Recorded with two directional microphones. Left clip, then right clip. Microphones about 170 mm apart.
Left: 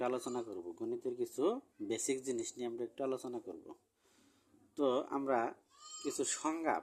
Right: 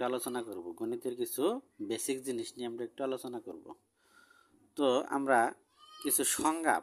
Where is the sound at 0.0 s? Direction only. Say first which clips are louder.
Right 3 dB; 20° right (ahead or behind).